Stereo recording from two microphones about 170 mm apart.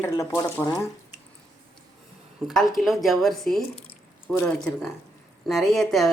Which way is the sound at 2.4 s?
5° right (ahead or behind).